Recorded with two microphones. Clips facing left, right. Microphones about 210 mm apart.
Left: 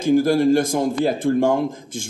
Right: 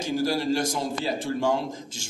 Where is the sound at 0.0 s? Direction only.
50° left (ahead or behind).